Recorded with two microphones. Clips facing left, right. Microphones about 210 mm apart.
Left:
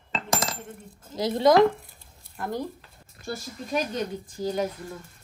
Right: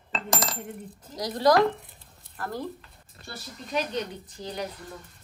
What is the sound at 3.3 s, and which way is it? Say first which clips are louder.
Speech: left 4 dB; 45° left (ahead or behind).